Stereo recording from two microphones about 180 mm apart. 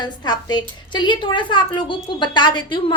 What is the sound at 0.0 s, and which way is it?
A woman's voice, 25° left (ahead or behind).